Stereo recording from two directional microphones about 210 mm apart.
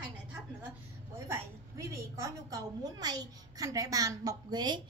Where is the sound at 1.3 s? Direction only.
15° right (ahead or behind).